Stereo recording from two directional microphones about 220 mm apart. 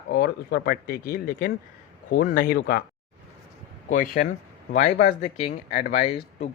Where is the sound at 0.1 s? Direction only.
45° left (ahead or behind).